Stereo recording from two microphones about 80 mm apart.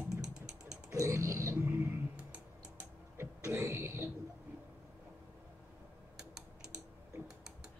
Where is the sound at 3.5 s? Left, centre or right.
Right.